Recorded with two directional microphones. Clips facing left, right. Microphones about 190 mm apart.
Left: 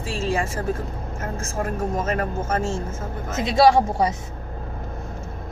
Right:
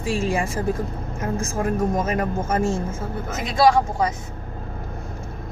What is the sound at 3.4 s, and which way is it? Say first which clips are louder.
Speech: left 2 dB; 20° left (ahead or behind).